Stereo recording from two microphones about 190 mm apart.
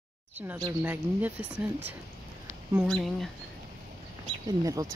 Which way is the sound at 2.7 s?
Centre (ahead or behind).